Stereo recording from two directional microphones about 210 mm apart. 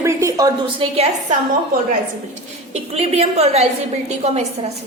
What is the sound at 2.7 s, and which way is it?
A woman's voice, 30° right (ahead or behind).